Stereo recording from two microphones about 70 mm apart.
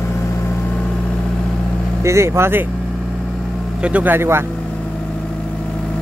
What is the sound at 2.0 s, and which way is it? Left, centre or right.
Speech, right.